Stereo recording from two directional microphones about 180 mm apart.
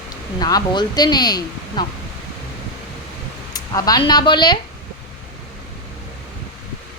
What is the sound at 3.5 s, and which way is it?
Speech, 20° left (ahead or behind).